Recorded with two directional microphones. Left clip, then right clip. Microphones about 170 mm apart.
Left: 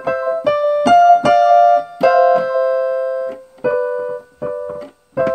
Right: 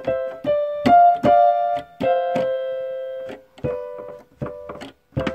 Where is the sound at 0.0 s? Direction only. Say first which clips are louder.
Left 6 dB; 30° left (ahead or behind).